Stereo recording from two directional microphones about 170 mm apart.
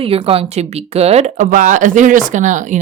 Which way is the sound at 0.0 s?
35° right (ahead or behind).